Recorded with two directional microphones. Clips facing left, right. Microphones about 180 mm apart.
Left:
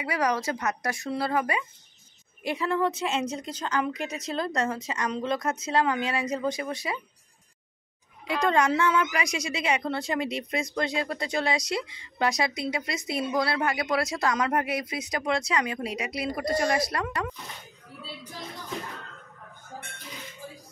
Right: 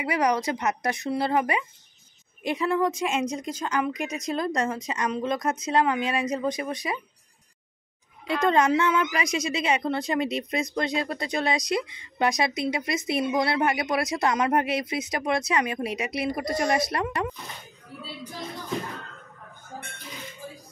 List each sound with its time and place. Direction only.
0.0 s a woman's voice: 20° right (ahead or behind)
8.4 s a woman's voice: 20° right (ahead or behind)